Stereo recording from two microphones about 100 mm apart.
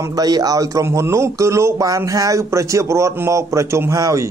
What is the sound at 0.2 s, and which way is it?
Speech, 40° right (ahead or behind).